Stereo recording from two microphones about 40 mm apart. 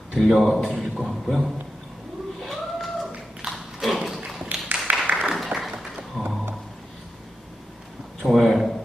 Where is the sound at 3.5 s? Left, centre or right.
Centre.